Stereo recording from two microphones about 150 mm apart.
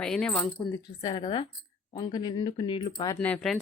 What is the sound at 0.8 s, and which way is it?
A woman's voice, 30° left (ahead or behind).